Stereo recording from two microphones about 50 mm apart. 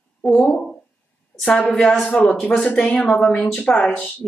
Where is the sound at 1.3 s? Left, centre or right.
Centre.